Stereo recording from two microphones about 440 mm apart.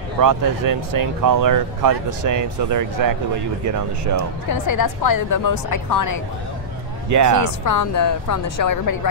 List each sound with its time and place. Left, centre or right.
0.2 s speech: right
4.6 s a woman's voice: left
7.1 s speech: right
7.6 s a woman's voice: left